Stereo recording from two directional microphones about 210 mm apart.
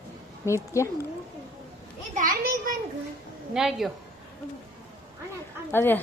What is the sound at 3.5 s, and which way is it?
Speech, centre (ahead or behind).